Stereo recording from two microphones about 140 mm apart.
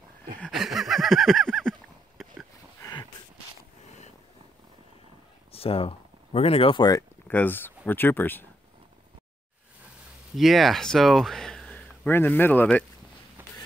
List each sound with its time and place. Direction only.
0.4 s a sound: centre (ahead or behind)
2.8 s a sound: 30° left (ahead or behind)
5.5 s speech: 45° left (ahead or behind)
7.0 s speech: 15° left (ahead or behind)
10.3 s speech: centre (ahead or behind)
13.4 s walk: 15° right (ahead or behind)